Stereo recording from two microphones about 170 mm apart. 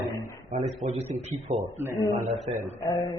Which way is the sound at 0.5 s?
45° right (ahead or behind).